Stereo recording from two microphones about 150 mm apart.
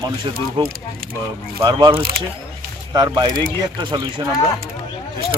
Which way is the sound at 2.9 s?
30° right (ahead or behind).